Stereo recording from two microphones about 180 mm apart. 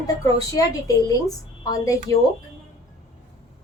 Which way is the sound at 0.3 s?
20° left (ahead or behind).